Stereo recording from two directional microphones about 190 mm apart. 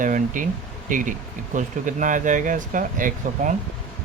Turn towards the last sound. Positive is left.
turn(degrees=-45)  # may be behind; listen again after turning